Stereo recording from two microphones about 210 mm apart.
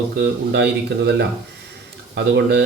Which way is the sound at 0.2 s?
55° right (ahead or behind).